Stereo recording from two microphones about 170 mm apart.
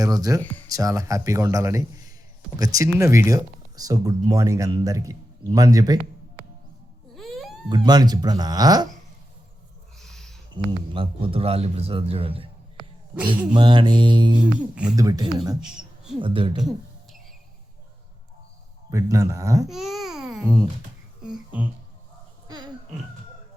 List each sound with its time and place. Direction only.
0.0 s speech: 20° right (ahead or behind)
7.2 s wail: centre (ahead or behind)
7.7 s speech: 25° right (ahead or behind)
10.0 s a sound: centre (ahead or behind)
10.7 s a man's voice: 30° right (ahead or behind)
13.5 s speech: 25° right (ahead or behind)
15.6 s a sound: 5° right (ahead or behind)
16.2 s a man's voice: 30° right (ahead or behind)
18.9 s speech: 20° right (ahead or behind)
19.7 s babbling: centre (ahead or behind)
21.2 s a sound: 10° right (ahead or behind)
22.4 s a sound: 25° right (ahead or behind)